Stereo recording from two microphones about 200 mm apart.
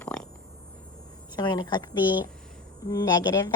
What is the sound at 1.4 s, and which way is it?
A woman's voice, 20° left (ahead or behind).